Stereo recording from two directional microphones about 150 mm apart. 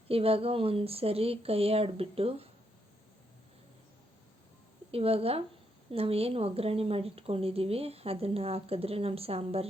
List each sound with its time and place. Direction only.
0.1 s speech: 40° right (ahead or behind)
4.9 s speech: 40° right (ahead or behind)